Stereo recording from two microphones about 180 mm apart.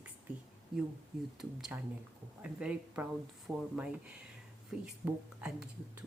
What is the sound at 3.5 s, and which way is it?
Speech, 15° right (ahead or behind).